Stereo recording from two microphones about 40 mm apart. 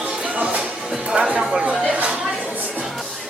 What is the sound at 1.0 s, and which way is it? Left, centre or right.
Music, right.